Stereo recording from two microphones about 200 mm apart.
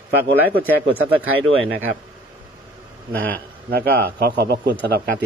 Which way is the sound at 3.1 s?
10° left (ahead or behind).